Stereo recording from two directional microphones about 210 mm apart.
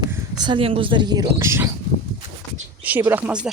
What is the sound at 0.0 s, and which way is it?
Speech, 20° right (ahead or behind).